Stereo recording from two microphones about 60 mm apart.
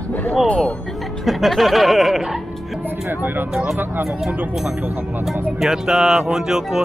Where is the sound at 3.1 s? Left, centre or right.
Right.